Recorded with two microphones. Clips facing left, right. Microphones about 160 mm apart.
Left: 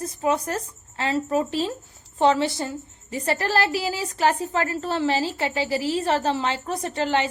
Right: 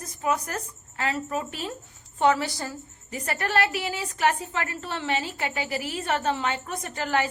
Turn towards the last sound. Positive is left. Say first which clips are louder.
# left 3 dB
turn(degrees=25)  # may be behind; listen again after turning